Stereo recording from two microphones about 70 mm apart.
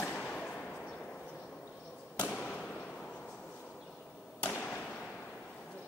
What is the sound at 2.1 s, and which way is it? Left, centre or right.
Basketball bounce, left.